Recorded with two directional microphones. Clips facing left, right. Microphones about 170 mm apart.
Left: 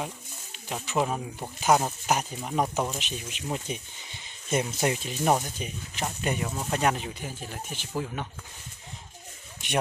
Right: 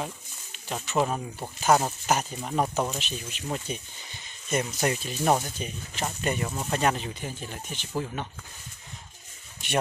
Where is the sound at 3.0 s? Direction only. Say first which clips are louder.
Even; 15° left (ahead or behind).